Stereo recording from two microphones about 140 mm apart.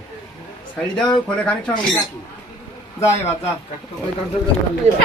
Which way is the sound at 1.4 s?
10° left (ahead or behind).